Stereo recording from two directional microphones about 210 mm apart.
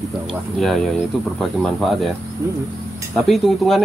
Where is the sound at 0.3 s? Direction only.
Centre (ahead or behind).